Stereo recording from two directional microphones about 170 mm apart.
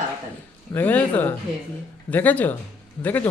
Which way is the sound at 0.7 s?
10° left (ahead or behind).